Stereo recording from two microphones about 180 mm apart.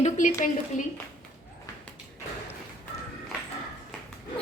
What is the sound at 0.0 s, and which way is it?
Speech, 45° left (ahead or behind).